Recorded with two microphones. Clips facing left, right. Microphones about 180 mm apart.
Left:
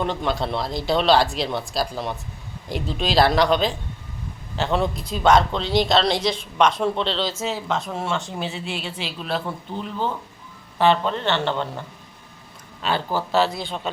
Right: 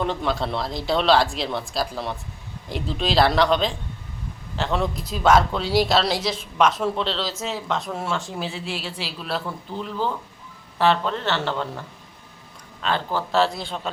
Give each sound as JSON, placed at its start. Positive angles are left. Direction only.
{"t": 0.0, "sound": "speech", "side_deg": 0}
{"t": 12.8, "sound": "speech", "side_deg": 5}